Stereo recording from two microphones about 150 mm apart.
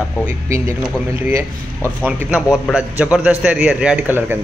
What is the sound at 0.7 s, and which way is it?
A man's voice, 15° right (ahead or behind).